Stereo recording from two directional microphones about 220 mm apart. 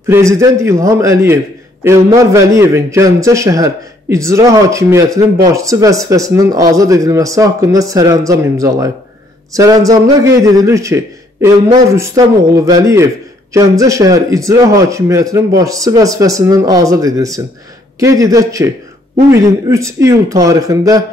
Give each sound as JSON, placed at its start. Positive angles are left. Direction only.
{"t": 0.1, "sound": "a man's voice", "side_deg": -15}